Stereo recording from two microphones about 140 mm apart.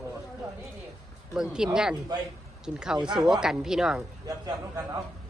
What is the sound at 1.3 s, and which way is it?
Speech, 5° right (ahead or behind).